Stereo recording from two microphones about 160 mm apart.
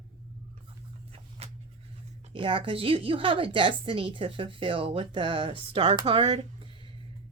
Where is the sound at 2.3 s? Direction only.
30° right (ahead or behind).